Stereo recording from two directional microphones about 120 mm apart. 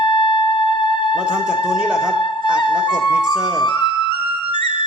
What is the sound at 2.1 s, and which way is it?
Music, 40° left (ahead or behind).